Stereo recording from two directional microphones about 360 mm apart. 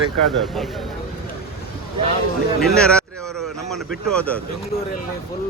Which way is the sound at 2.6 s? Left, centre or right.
Centre.